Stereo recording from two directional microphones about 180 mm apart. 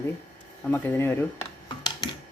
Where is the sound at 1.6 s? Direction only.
25° left (ahead or behind).